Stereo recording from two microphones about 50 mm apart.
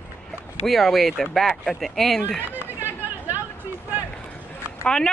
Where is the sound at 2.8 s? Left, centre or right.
Right.